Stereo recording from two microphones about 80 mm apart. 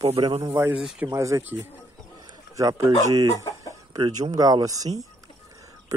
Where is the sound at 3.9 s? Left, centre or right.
Right.